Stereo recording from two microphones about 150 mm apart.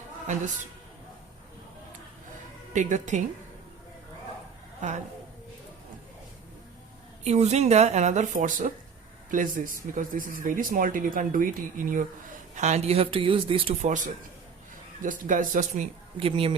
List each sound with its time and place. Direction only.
2.7 s speech: 55° right (ahead or behind)
4.8 s speech: 55° right (ahead or behind)
7.3 s speech: 50° right (ahead or behind); by 12.0 s 65° right (ahead or behind)
12.5 s speech: 50° right (ahead or behind)
13.8 s speech: 55° right (ahead or behind)
16.1 s speech: 35° right (ahead or behind)